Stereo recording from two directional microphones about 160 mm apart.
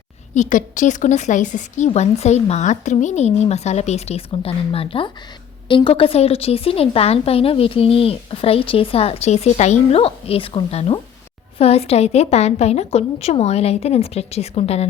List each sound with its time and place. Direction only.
0.3 s a woman's voice: 50° left (ahead or behind)